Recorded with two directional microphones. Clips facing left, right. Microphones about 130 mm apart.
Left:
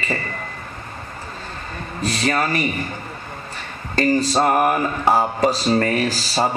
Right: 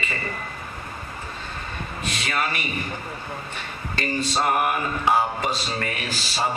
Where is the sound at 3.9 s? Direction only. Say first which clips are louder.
Left 8 dB; 40° left (ahead or behind).